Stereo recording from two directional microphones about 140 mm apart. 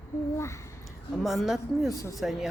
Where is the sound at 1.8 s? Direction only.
25° left (ahead or behind).